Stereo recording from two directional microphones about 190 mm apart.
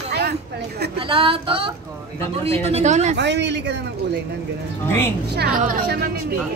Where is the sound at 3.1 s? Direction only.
65° right (ahead or behind).